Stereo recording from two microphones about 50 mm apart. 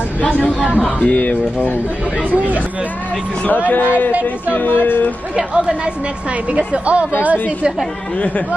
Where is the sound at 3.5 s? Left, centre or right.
Left.